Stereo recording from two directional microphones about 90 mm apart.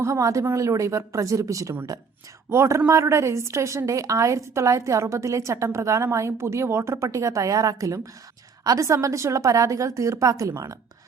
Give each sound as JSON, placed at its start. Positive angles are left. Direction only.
{"t": 0.0, "sound": "a woman's voice", "side_deg": -35}